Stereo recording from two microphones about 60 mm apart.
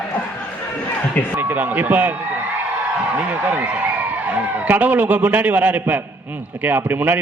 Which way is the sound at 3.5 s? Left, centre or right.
Right.